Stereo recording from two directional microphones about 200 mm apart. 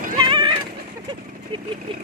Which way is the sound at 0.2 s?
25° right (ahead or behind).